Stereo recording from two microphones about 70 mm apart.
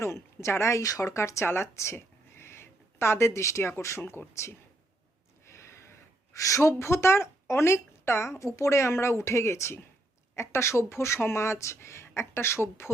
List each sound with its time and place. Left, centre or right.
0.0 s speech: left
5.5 s gasp: left
6.3 s a woman's voice: left